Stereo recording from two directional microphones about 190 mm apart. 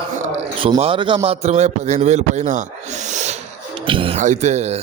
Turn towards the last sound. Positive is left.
turn(degrees=-35)  # may be behind; listen again after turning